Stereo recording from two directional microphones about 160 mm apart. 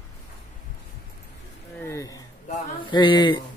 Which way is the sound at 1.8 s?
15° left (ahead or behind).